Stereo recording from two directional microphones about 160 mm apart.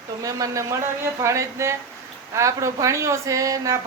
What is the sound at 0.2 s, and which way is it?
A woman's voice, 20° right (ahead or behind).